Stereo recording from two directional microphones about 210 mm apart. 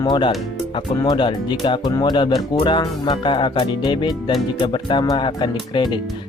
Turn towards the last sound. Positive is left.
turn(degrees=20)  # may be behind; listen again after turning